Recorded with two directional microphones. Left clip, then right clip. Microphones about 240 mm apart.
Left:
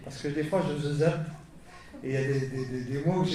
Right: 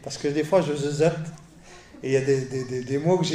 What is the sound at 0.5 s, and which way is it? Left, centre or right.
Speech, right.